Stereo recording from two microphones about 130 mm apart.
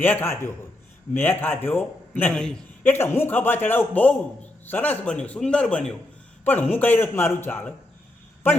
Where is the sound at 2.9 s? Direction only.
20° left (ahead or behind).